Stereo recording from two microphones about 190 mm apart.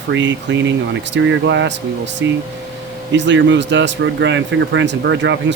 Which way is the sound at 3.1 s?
70° right (ahead or behind).